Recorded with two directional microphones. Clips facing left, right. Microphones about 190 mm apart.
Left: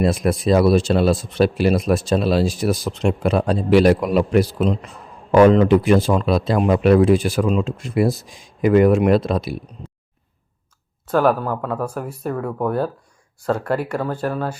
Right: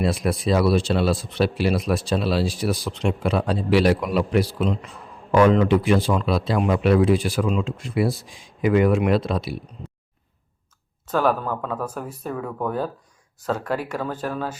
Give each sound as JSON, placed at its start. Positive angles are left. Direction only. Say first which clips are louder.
{"t": 0.0, "sound": "speech", "louder": "left 4 dB", "side_deg": 45}
{"t": 11.0, "sound": "speech", "louder": "left 4 dB", "side_deg": 10}
{"t": 14.0, "sound": "speech", "louder": "left 4 dB", "side_deg": 10}